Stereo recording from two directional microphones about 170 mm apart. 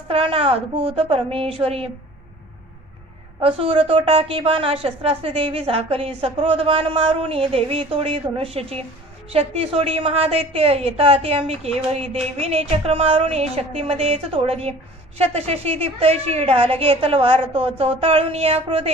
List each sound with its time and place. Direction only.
0.1 s a woman's voice: 35° right (ahead or behind)
3.3 s a woman's voice: 35° right (ahead or behind)